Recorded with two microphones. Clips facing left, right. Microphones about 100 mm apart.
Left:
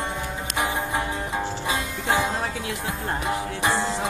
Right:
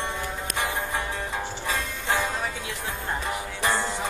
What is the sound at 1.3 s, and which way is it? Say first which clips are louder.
Music: left 4 dB; 15° left (ahead or behind).